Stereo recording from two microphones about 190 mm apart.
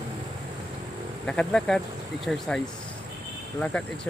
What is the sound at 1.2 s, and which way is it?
Speech, 5° left (ahead or behind).